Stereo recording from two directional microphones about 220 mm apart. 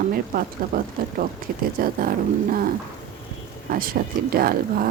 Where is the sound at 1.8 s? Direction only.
40° right (ahead or behind).